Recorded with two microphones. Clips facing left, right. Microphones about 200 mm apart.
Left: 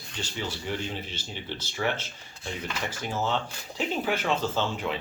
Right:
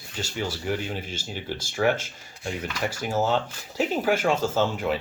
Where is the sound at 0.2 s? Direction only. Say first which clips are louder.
Right 4 dB; 10° right (ahead or behind).